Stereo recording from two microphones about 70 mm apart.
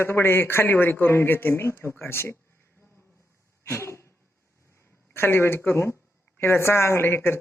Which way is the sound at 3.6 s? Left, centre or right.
Left.